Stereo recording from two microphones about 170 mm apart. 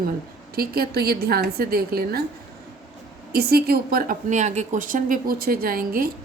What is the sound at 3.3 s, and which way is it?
A woman's voice, 65° right (ahead or behind).